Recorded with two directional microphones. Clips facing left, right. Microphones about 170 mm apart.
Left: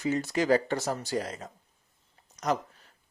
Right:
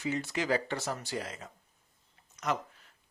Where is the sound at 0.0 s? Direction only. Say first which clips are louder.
Left 5 dB; 40° left (ahead or behind).